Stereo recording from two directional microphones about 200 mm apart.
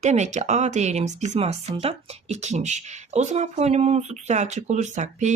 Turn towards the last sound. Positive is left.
turn(degrees=-35)  # may be behind; listen again after turning